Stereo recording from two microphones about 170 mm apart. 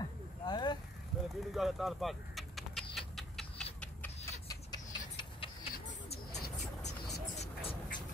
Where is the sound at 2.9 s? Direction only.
Centre (ahead or behind).